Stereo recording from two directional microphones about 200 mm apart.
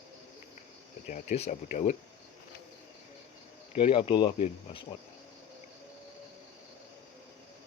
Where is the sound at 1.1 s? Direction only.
40° left (ahead or behind).